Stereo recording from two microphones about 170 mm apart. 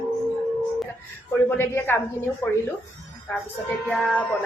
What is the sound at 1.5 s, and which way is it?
Speech, 15° left (ahead or behind).